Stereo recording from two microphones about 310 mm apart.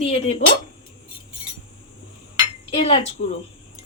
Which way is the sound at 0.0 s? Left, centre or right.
Left.